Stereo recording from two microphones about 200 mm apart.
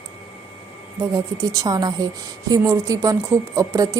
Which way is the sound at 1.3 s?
15° right (ahead or behind).